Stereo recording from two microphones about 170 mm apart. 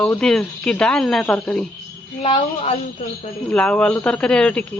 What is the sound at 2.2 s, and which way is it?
Speech, 35° left (ahead or behind).